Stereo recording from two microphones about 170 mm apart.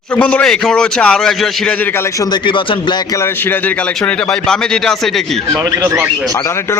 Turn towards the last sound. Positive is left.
turn(degrees=-15)  # may be behind; listen again after turning